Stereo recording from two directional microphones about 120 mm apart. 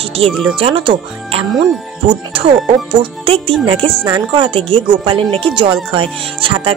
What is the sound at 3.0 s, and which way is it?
A woman's voice, 50° right (ahead or behind).